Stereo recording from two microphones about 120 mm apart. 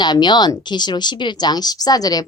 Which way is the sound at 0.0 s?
40° left (ahead or behind).